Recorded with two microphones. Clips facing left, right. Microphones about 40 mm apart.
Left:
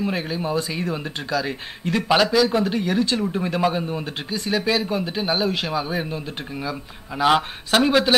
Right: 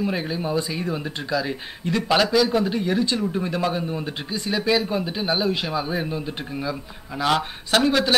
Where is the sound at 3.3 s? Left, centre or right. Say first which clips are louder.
Left 2 dB; centre.